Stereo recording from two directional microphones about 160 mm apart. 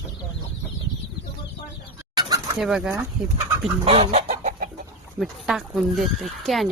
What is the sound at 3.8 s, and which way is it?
Chicken, 40° right (ahead or behind).